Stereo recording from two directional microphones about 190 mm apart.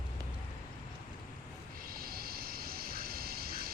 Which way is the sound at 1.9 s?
50° right (ahead or behind).